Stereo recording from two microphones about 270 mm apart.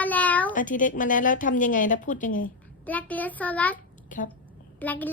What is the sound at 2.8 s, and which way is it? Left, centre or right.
Speech, centre.